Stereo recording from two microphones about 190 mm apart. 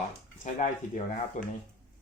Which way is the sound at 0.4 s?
40° left (ahead or behind).